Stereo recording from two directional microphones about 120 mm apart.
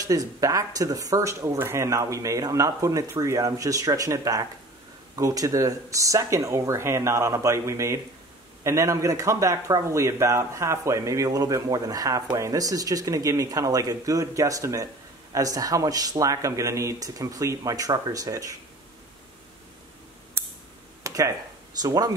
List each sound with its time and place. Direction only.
0.0 s speech: 30° right (ahead or behind)
21.0 s a sound: 25° right (ahead or behind)
21.8 s speech: 35° right (ahead or behind)